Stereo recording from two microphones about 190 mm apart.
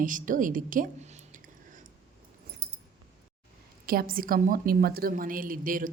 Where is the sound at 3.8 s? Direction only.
50° right (ahead or behind).